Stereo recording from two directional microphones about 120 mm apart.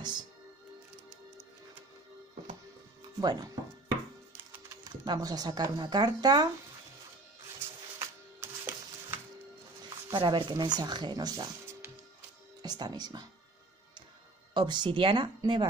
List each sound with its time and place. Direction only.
3.2 s speech: 35° right (ahead or behind)
4.8 s speech: 35° right (ahead or behind)
8.0 s music: 20° right (ahead or behind)
10.1 s speech: 40° right (ahead or behind)
12.6 s speech: 35° right (ahead or behind)
14.5 s speech: 40° right (ahead or behind)